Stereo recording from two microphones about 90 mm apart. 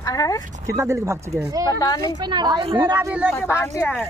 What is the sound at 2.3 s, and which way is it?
Speech, 55° right (ahead or behind).